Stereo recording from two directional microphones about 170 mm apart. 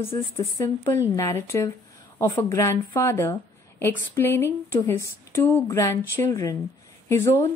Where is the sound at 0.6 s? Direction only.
15° left (ahead or behind).